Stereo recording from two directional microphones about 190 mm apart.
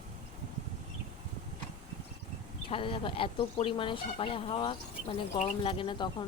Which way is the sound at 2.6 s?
25° left (ahead or behind).